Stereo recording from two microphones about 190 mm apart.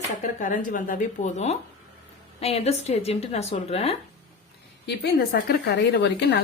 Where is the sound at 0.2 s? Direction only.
45° left (ahead or behind).